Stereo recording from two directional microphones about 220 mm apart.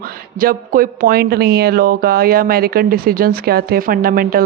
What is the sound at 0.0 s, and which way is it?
Speech, 40° right (ahead or behind).